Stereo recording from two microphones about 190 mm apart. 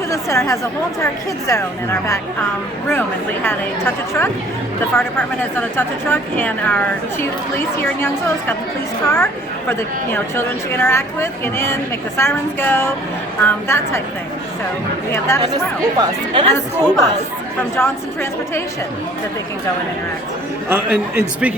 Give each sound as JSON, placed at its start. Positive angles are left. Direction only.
{"t": 0.1, "sound": "a woman's voice", "side_deg": 15}
{"t": 3.4, "sound": "a woman's voice", "side_deg": 10}
{"t": 15.5, "sound": "speech", "side_deg": -25}
{"t": 16.5, "sound": "a woman's voice", "side_deg": 15}
{"t": 20.7, "sound": "a man's voice", "side_deg": -10}